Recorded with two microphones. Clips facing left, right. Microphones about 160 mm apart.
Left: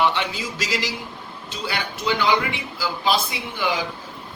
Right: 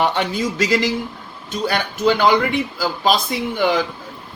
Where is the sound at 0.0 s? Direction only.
45° right (ahead or behind).